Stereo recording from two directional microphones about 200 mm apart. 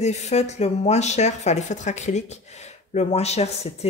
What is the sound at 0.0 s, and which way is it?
Speech, 35° left (ahead or behind).